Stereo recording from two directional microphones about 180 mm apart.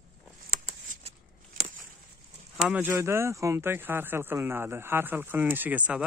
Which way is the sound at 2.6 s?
10° right (ahead or behind).